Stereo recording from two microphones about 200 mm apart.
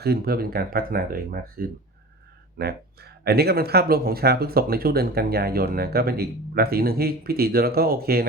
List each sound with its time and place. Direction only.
0.0 s speech: 50° right (ahead or behind)